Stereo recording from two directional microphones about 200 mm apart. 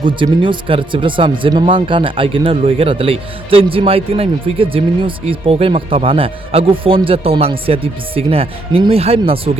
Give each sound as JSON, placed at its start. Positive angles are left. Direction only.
{"t": 0.0, "sound": "speech", "side_deg": -25}